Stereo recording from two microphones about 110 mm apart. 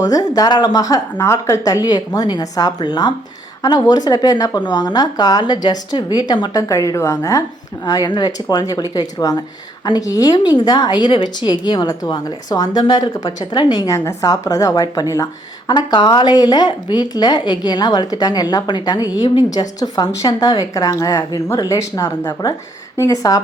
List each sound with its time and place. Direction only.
0.0 s a woman's voice: 35° left (ahead or behind)
6.6 s a woman's voice: 30° left (ahead or behind)
15.7 s a woman's voice: 40° left (ahead or behind)